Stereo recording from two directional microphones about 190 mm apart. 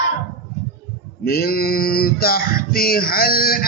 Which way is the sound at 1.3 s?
55° left (ahead or behind).